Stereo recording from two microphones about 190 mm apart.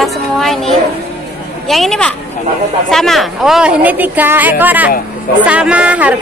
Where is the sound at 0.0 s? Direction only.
Centre (ahead or behind).